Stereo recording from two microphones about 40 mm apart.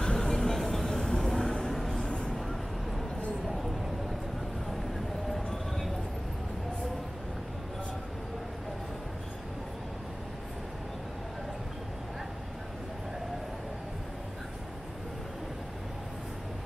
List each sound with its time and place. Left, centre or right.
0.0 s music: centre
1.7 s vehicle: centre
2.0 s a sound: left